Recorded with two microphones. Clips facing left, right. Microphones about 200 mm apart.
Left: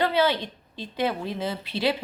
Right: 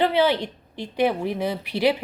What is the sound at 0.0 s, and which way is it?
A woman's voice, 15° right (ahead or behind).